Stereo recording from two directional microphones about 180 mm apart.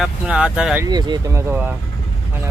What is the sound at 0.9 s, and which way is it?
Speech, 25° right (ahead or behind).